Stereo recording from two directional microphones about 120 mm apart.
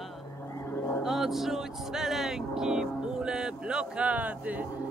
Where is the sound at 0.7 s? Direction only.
20° left (ahead or behind).